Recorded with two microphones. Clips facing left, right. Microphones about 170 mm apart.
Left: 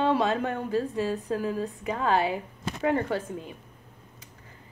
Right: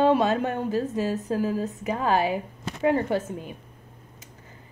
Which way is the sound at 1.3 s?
40° right (ahead or behind).